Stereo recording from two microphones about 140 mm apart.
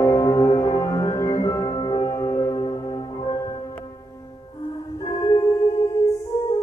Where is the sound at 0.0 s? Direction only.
20° left (ahead or behind).